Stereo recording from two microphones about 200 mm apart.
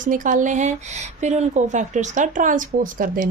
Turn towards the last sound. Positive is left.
turn(degrees=-45)  # may be behind; listen again after turning